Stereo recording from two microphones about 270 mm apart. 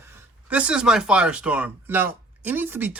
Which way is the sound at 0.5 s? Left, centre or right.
Centre.